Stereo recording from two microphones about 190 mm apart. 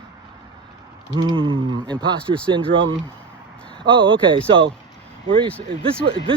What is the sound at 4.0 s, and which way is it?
Speech, 25° right (ahead or behind).